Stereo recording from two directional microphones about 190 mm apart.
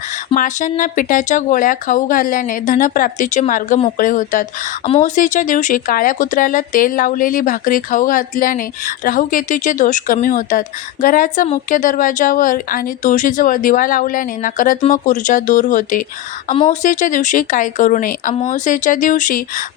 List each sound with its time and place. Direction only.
0.3 s speech: 40° left (ahead or behind)